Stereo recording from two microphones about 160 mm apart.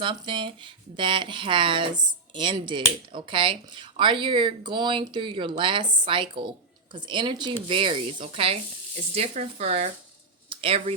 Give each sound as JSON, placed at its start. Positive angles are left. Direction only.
{"t": 0.0, "sound": "speech", "side_deg": -30}